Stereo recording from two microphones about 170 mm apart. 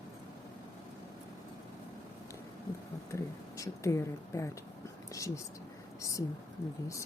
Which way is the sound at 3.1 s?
20° left (ahead or behind).